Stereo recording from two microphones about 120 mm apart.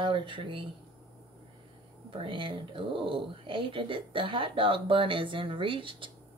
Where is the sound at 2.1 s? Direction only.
45° right (ahead or behind).